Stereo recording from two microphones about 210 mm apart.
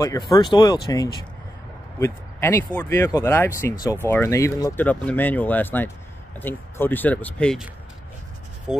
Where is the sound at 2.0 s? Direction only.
10° left (ahead or behind).